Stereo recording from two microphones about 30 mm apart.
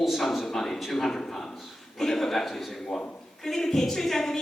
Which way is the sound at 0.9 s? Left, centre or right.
Centre.